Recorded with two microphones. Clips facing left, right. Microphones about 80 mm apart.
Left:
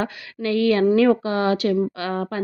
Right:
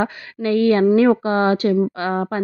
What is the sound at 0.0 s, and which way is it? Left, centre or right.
Speech, right.